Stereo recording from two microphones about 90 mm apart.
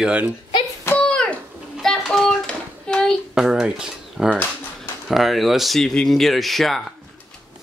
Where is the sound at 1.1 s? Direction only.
10° left (ahead or behind).